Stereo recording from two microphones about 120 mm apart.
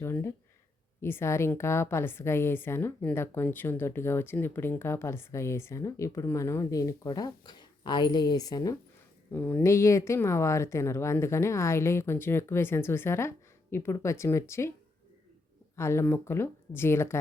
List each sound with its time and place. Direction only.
0.0 s a woman's voice: 20° left (ahead or behind)
9.3 s a woman's voice: 15° left (ahead or behind)
15.7 s a woman's voice: 20° left (ahead or behind)